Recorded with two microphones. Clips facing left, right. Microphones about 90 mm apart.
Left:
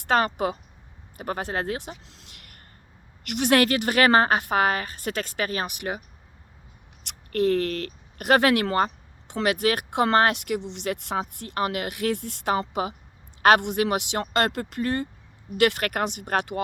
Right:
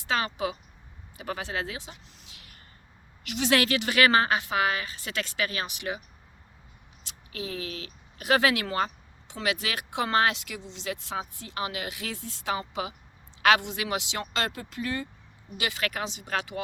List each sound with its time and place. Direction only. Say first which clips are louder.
0.0 s a woman's voice: left 6 dB; 55° left (ahead or behind)
2.0 s a sound: left 2 dB; 60° left (ahead or behind)
3.2 s a woman's voice: left 4 dB; 55° left (ahead or behind)
7.0 s a woman's voice: left 14 dB; 65° left (ahead or behind)
15.5 s speech: left 9 dB; 65° left (ahead or behind)